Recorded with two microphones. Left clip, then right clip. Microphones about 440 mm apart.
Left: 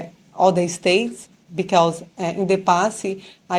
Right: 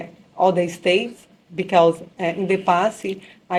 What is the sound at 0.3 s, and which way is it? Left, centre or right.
Speech, centre.